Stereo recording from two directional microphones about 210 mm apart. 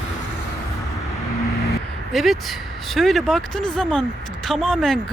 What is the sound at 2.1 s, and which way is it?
Speech, centre (ahead or behind).